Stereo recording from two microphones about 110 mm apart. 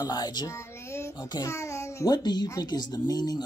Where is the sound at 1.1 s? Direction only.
35° left (ahead or behind).